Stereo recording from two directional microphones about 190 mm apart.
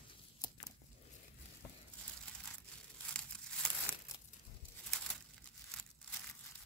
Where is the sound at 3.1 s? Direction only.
5° left (ahead or behind).